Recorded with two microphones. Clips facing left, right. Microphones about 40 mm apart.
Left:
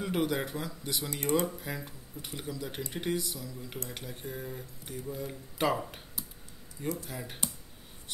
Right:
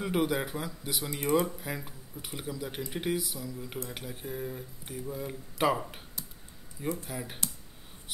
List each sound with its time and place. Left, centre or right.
0.0 s speech: centre
1.1 s speech: right
1.4 s speech: centre
7.1 s speech: centre